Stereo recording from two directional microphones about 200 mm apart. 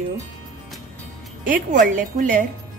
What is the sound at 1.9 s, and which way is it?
Speech, 40° right (ahead or behind).